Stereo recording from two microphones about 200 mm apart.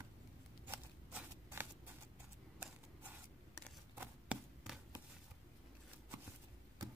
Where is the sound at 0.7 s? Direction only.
10° right (ahead or behind).